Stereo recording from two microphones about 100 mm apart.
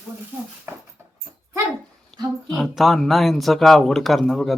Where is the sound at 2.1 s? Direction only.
Centre (ahead or behind).